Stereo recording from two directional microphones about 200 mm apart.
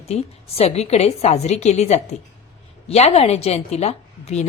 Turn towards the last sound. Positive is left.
turn(degrees=35)  # may be behind; listen again after turning